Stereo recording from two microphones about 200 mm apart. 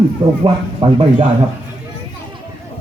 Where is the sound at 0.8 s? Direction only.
30° right (ahead or behind).